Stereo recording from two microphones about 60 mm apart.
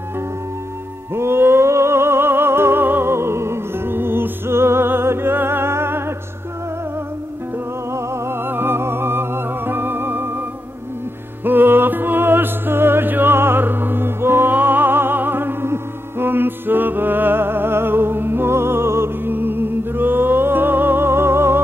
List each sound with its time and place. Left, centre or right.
1.1 s music: right
7.9 s music: right
8.5 s music: right
11.4 s music: right